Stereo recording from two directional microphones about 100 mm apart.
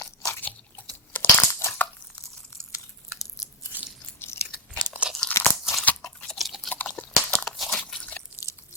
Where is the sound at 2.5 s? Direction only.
25° left (ahead or behind).